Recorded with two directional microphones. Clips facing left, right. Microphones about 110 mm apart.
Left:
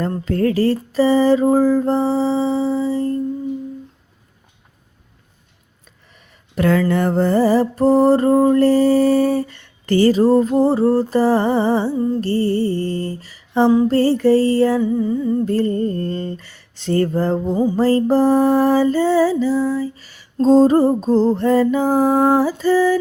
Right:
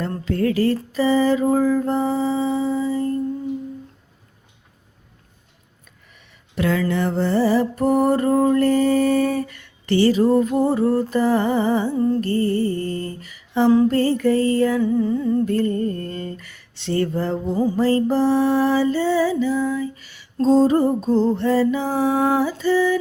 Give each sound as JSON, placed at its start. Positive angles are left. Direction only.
{"t": 0.3, "sound": "music", "side_deg": 40}
{"t": 6.6, "sound": "mantra", "side_deg": 50}
{"t": 8.4, "sound": "music", "side_deg": 30}
{"t": 14.8, "sound": "humming", "side_deg": 15}
{"t": 15.4, "sound": "music", "side_deg": 30}